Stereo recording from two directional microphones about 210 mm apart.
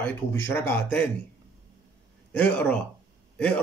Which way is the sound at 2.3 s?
5° left (ahead or behind).